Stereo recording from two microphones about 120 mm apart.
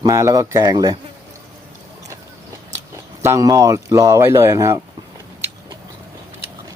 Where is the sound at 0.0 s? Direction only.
25° right (ahead or behind).